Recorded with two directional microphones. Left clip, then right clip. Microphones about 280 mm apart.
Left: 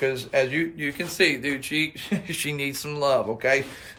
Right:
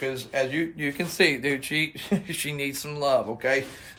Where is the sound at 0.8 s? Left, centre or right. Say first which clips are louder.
Right 1 dB; centre.